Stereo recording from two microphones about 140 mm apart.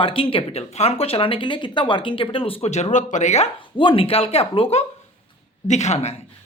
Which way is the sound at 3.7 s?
40° left (ahead or behind).